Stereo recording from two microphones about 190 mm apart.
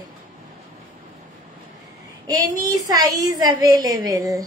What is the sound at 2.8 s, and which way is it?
A woman's voice, 20° right (ahead or behind).